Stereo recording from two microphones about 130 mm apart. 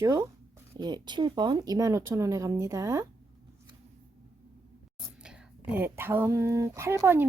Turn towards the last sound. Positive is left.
turn(degrees=-20)  # may be behind; listen again after turning